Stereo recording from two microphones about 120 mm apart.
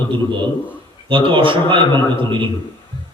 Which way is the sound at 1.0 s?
45° right (ahead or behind).